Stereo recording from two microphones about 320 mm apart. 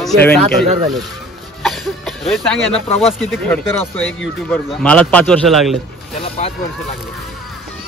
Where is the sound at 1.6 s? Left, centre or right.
Centre.